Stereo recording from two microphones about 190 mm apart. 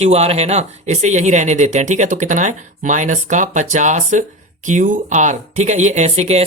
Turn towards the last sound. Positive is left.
turn(degrees=-35)  # may be behind; listen again after turning